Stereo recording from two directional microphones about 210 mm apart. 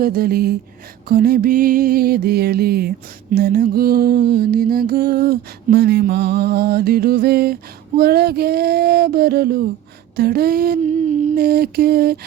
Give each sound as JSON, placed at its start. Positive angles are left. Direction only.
{"t": 0.0, "sound": "mantra", "side_deg": -45}